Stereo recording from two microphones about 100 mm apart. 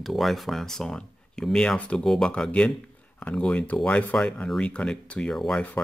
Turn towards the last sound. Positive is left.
turn(degrees=5)  # may be behind; listen again after turning